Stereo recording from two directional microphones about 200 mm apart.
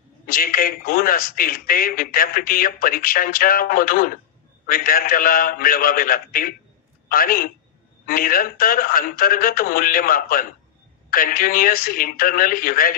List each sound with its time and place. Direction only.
0.3 s speech: 45° left (ahead or behind)